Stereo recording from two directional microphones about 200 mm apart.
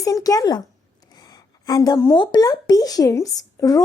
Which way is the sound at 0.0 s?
15° left (ahead or behind).